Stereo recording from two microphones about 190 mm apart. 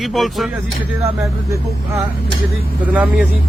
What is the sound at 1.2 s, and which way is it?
Speech, 15° right (ahead or behind).